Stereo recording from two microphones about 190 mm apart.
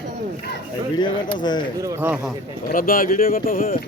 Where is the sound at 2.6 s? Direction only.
50° left (ahead or behind).